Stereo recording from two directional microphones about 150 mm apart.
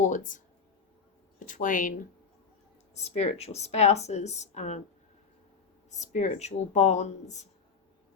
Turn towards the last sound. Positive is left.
turn(degrees=50)  # may be behind; listen again after turning